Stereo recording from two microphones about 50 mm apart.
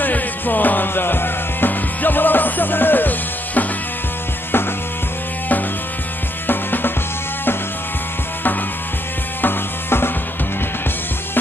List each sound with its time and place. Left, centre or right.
0.0 s music: left
6.4 s music: left
9.4 s music: left